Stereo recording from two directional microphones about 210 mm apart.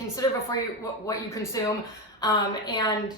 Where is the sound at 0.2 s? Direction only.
20° left (ahead or behind).